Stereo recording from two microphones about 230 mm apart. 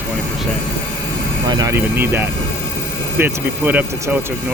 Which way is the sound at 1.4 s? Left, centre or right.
Centre.